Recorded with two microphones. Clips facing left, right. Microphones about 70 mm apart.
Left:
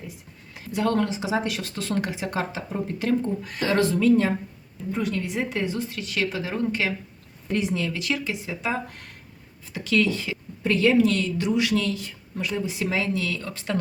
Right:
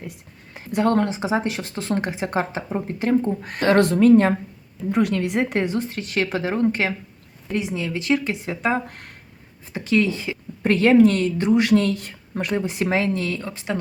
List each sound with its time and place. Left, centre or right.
0.8 s speech: right
3.4 s speech: right
4.9 s speech: right
7.5 s speech: centre
8.0 s speech: right
9.7 s speech: right
10.6 s speech: right
13.4 s speech: right